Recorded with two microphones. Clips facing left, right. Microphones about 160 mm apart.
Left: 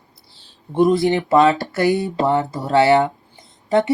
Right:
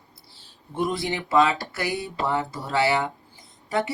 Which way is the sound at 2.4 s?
40° left (ahead or behind).